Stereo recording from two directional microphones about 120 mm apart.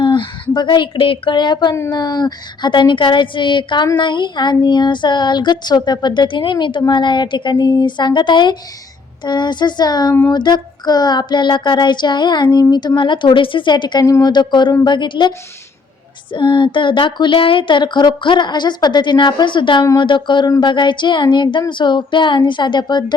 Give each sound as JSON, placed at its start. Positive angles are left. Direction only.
{"t": 0.0, "sound": "a sound", "side_deg": 40}
{"t": 0.5, "sound": "child singing", "side_deg": 40}
{"t": 16.3, "sound": "child singing", "side_deg": 40}